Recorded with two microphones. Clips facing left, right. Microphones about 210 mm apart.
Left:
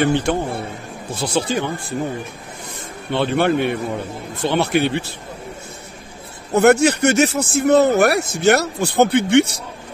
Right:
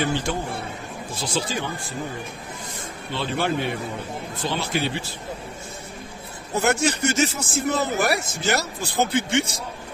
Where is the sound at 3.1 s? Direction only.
60° left (ahead or behind).